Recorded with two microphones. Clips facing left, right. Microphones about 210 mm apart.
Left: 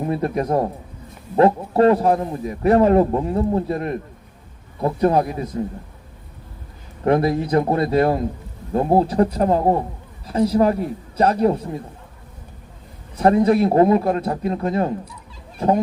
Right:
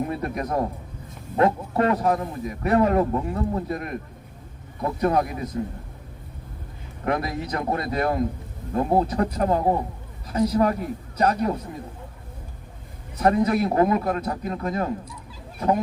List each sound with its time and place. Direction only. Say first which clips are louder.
0.1 s a man's voice: left 6 dB; 30° left (ahead or behind)
7.0 s a man's voice: left 8 dB; 30° left (ahead or behind)
13.1 s a man's voice: left 5 dB; 30° left (ahead or behind)
15.5 s a sound: left 4 dB; 30° left (ahead or behind)